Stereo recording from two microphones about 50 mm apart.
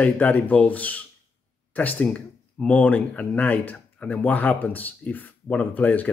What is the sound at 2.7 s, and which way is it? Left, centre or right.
Speech, left.